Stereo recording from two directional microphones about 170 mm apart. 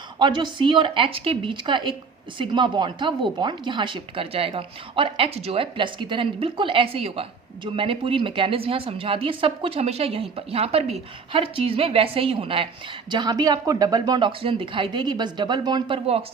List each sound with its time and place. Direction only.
0.2 s a woman's voice: 25° right (ahead or behind)